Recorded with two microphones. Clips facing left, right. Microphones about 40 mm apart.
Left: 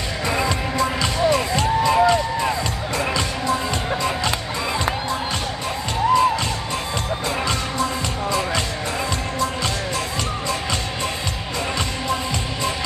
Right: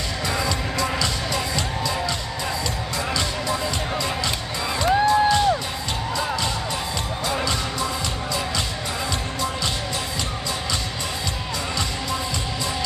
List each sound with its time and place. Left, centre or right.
0.3 s music: left